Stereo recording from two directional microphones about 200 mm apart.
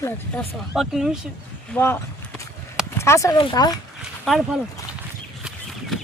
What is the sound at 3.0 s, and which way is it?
Speech, 15° left (ahead or behind).